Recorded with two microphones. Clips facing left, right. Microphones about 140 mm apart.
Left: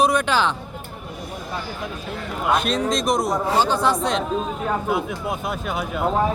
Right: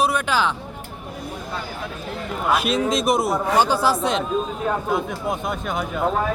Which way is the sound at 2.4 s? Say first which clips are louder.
Even; 5° right (ahead or behind).